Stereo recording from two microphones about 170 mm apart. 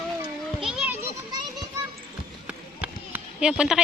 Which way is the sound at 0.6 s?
5° right (ahead or behind).